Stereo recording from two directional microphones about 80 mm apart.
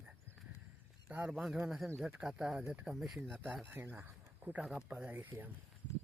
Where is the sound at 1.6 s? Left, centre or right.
Centre.